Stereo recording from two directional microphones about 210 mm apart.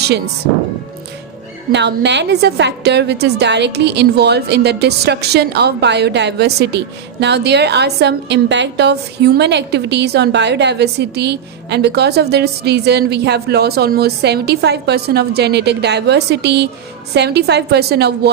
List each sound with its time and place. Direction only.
1.7 s a woman's voice: 55° right (ahead or behind)